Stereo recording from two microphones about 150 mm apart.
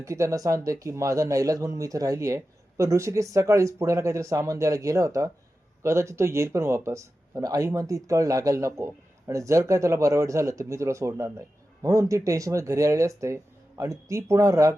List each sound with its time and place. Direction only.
0.0 s speech: 20° right (ahead or behind)